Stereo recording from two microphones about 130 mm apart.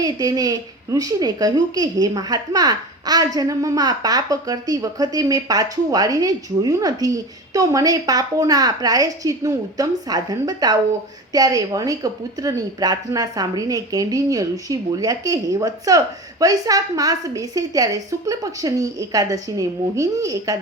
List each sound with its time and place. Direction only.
0.0 s a child's voice: 30° right (ahead or behind)